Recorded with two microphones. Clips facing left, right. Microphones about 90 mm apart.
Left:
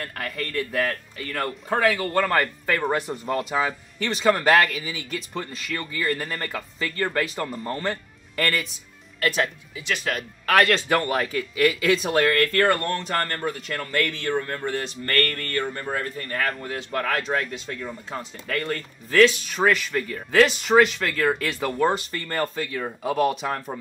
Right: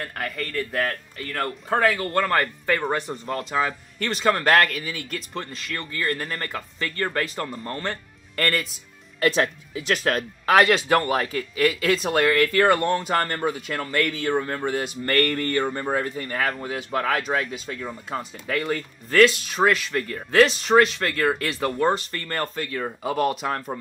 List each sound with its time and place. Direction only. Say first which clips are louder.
0.0 s a man's voice: right 1 dB; 5° right (ahead or behind)
9.2 s speech: right 3 dB; 35° right (ahead or behind)
10.4 s a man's voice: right 2 dB; 15° right (ahead or behind); by 23.8 s centre (ahead or behind)